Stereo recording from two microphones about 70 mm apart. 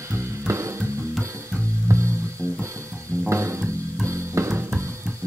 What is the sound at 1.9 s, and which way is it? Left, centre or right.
Music, right.